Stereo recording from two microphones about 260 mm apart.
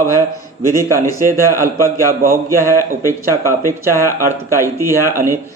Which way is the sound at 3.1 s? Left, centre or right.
Centre.